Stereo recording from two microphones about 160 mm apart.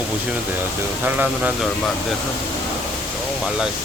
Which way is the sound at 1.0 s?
10° right (ahead or behind).